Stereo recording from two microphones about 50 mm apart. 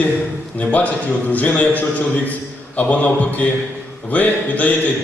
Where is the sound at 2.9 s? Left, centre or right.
Left.